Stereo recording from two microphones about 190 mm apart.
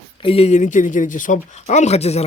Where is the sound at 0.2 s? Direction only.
30° left (ahead or behind).